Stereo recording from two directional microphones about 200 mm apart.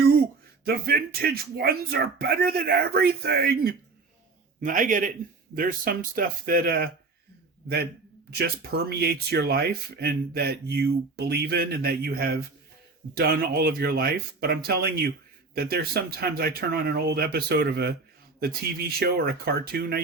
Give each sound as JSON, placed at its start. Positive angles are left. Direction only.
{"t": 0.6, "sound": "a man's voice", "side_deg": -50}
{"t": 8.3, "sound": "speech", "side_deg": -55}